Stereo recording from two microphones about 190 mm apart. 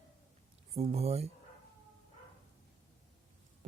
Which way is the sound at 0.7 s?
35° right (ahead or behind).